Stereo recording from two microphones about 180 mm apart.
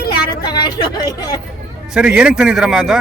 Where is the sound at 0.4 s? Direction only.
25° left (ahead or behind).